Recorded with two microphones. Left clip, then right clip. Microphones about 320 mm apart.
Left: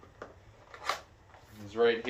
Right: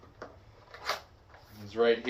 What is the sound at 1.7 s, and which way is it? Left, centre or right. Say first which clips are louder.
Speech: right 1 dB; centre.